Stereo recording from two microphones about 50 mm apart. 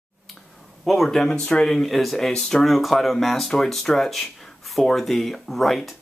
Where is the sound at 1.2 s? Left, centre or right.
Centre.